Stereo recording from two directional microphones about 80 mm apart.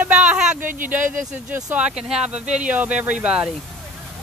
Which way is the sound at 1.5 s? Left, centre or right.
Centre.